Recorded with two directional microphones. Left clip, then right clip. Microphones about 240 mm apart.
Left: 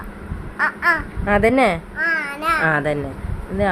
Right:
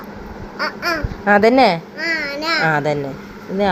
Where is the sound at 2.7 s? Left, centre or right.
Centre.